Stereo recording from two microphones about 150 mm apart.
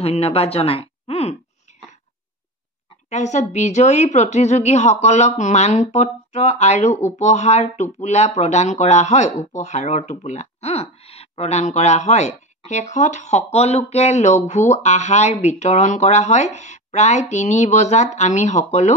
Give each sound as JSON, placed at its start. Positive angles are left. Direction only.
{"t": 0.0, "sound": "speech", "side_deg": 40}
{"t": 3.1, "sound": "speech", "side_deg": 50}